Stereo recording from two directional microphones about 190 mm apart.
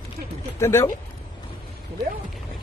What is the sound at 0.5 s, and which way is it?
Speech, 15° left (ahead or behind).